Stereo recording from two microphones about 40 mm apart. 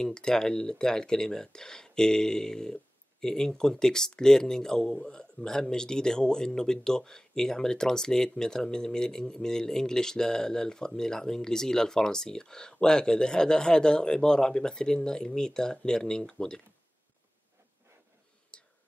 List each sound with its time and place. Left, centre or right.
0.0 s speech: centre
18.5 s whispering: left